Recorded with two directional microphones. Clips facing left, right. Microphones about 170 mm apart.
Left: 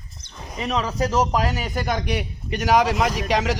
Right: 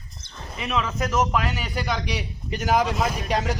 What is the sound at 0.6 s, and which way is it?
A man's voice, 40° left (ahead or behind).